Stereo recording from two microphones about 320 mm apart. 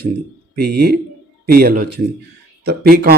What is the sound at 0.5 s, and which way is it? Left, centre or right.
Speech, right.